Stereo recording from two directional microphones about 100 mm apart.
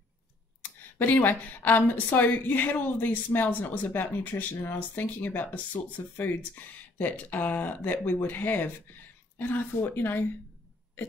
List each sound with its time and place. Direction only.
0.6 s a woman's voice: 15° left (ahead or behind)